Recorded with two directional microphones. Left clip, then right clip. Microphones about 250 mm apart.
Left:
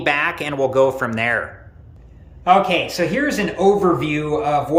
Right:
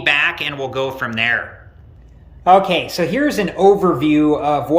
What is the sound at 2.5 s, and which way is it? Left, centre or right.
Speech, right.